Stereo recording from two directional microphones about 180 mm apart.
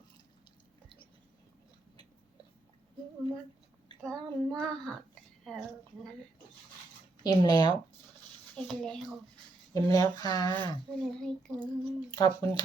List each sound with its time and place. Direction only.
4.0 s child singing: 5° left (ahead or behind)
7.3 s speech: 25° left (ahead or behind)
8.5 s child singing: 5° left (ahead or behind)
9.7 s speech: 20° left (ahead or behind)
11.0 s child singing: 5° left (ahead or behind)
11.6 s speech: 20° left (ahead or behind)